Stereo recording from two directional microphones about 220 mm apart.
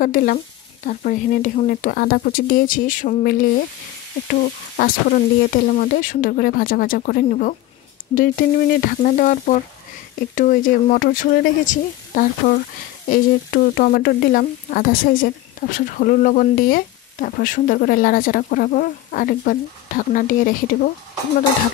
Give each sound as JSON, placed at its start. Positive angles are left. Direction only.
{"t": 0.0, "sound": "speech", "side_deg": 40}